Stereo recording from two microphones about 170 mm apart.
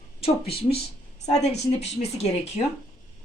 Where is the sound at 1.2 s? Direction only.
40° left (ahead or behind).